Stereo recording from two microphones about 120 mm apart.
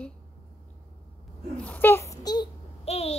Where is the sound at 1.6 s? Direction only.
15° left (ahead or behind); by 2.4 s 30° left (ahead or behind).